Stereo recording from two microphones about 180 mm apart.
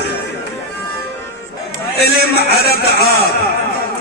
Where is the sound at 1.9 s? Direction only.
60° left (ahead or behind).